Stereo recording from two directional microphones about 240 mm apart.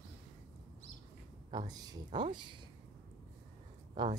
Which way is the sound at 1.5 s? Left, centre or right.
Centre.